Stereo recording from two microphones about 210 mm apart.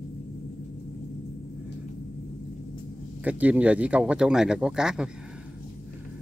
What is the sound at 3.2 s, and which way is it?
Speech, 5° right (ahead or behind).